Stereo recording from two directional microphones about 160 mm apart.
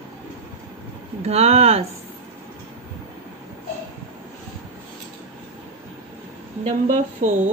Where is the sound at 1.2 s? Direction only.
40° right (ahead or behind).